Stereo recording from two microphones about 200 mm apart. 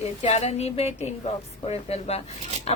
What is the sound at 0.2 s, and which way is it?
Speech, 30° left (ahead or behind).